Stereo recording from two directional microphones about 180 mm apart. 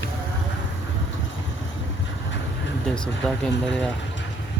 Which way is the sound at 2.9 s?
5° left (ahead or behind).